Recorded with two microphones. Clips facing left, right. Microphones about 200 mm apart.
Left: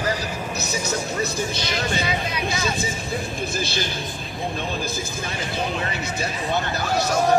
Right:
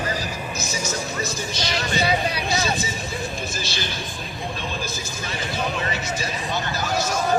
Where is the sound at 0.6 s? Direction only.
60° left (ahead or behind).